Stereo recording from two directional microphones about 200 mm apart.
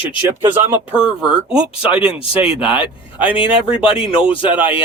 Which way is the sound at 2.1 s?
30° left (ahead or behind).